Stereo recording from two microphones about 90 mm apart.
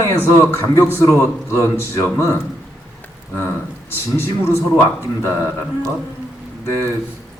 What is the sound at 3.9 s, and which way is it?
A man's voice, 25° left (ahead or behind).